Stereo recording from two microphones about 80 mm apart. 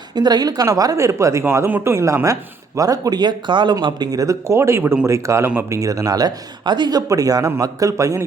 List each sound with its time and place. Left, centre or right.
0.1 s speech: right
4.5 s a man's voice: right
7.1 s speech: right